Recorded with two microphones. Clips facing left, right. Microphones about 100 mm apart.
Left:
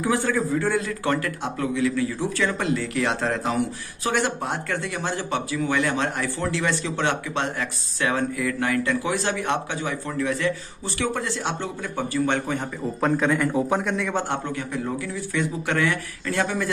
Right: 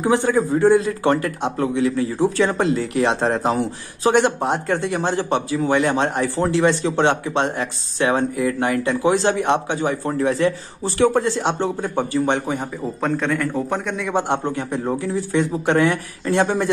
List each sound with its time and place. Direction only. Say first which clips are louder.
0.0 s a man's voice: right 5 dB; 25° right (ahead or behind)
13.0 s a man's voice: even; 5° left (ahead or behind)
14.1 s a man's voice: right 5 dB; 20° right (ahead or behind)
14.4 s a man's voice: right 5 dB; 30° right (ahead or behind)